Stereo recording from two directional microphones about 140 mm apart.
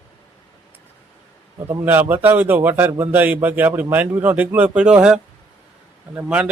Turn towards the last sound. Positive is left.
turn(degrees=-10)  # may be behind; listen again after turning